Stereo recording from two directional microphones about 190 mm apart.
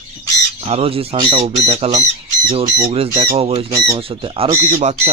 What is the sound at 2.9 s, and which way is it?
Speech, 30° right (ahead or behind).